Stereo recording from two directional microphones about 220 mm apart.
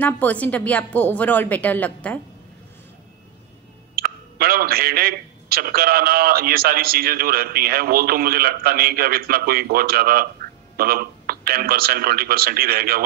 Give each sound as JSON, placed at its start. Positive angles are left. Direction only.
{"t": 0.0, "sound": "a woman's voice", "side_deg": 5}
{"t": 3.9, "sound": "a man's voice", "side_deg": -45}